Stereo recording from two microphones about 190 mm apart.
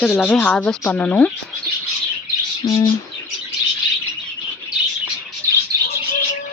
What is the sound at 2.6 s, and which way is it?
Speech, 15° left (ahead or behind).